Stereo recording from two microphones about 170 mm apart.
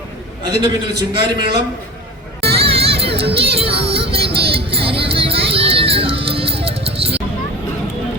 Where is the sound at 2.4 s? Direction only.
35° right (ahead or behind).